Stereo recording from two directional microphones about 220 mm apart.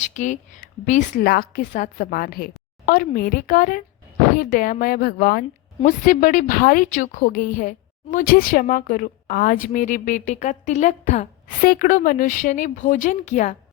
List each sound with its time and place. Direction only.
0.0 s a woman's voice: 35° left (ahead or behind)